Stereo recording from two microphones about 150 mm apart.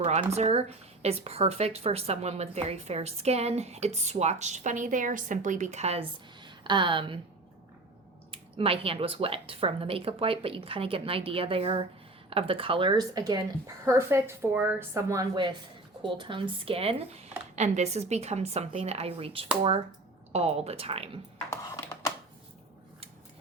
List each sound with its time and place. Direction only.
0.0 s a woman's voice: 45° right (ahead or behind)
6.4 s speech: 35° right (ahead or behind)
8.3 s a woman's voice: 40° right (ahead or behind)